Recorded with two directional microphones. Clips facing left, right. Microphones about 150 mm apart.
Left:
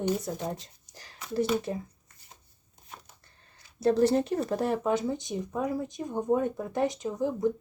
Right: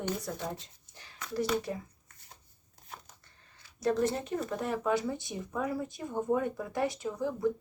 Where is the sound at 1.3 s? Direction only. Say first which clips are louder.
Left 4 dB; 25° left (ahead or behind).